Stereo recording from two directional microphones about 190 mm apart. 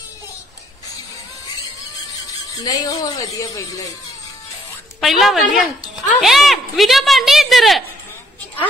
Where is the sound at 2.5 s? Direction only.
20° left (ahead or behind).